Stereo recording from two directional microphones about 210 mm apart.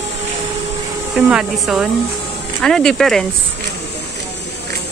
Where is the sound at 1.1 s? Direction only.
5° right (ahead or behind).